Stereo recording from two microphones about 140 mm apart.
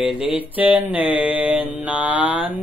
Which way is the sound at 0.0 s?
40° left (ahead or behind).